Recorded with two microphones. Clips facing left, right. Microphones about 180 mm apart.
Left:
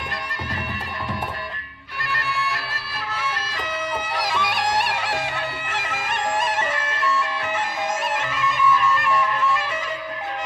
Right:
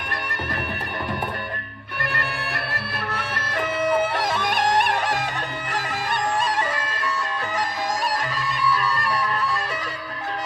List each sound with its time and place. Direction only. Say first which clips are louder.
2.0 s music: left 1 dB; 60° right (ahead or behind); by 5.1 s 45° right (ahead or behind)
5.7 s bagpipes: right 3 dB; 35° right (ahead or behind)
8.0 s music: left 1 dB; 35° right (ahead or behind)